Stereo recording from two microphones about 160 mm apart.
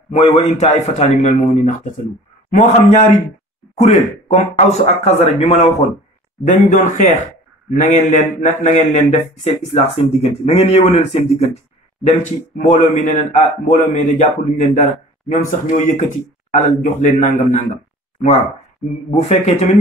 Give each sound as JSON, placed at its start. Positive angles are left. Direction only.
{"t": 0.1, "sound": "a man's voice", "side_deg": 40}
{"t": 6.4, "sound": "a man's voice", "side_deg": 55}
{"t": 19.0, "sound": "a man's voice", "side_deg": 40}